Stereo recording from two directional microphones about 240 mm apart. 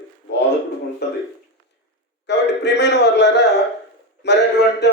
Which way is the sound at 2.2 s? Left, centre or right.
Left.